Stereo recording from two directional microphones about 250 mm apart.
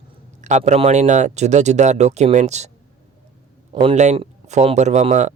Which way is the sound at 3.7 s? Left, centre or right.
Right.